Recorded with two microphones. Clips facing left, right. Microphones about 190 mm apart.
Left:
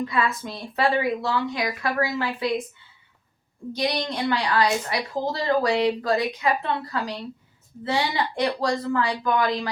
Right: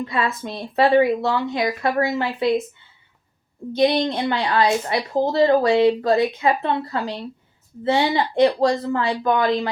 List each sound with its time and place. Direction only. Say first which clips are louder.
0.1 s speech: right 2 dB; 25° right (ahead or behind)
3.7 s speech: right 8 dB; 25° right (ahead or behind)